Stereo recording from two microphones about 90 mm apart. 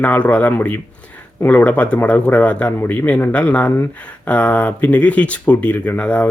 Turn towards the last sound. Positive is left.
turn(degrees=15)  # may be behind; listen again after turning